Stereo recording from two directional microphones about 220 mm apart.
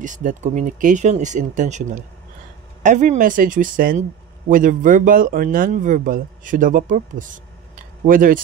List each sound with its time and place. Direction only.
0.0 s speech: 35° right (ahead or behind)